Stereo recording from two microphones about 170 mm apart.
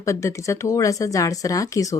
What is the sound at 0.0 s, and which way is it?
A woman's voice, 20° left (ahead or behind).